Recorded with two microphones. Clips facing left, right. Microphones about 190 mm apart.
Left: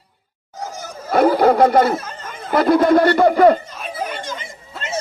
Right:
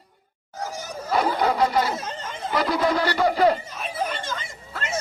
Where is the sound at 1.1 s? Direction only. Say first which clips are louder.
Left 9 dB; 55° left (ahead or behind).